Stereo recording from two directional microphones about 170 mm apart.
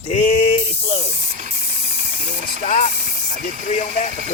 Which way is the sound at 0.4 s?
35° left (ahead or behind).